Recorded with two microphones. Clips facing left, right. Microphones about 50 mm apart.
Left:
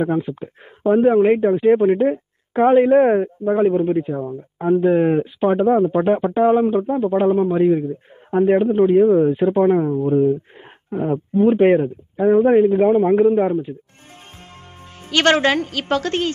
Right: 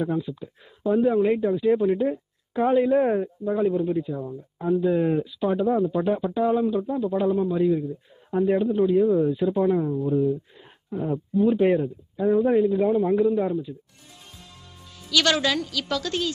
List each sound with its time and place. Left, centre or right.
0.0 s speech: left
15.0 s speech: left